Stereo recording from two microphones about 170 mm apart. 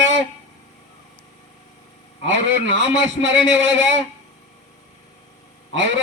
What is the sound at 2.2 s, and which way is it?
Speech, 90° right.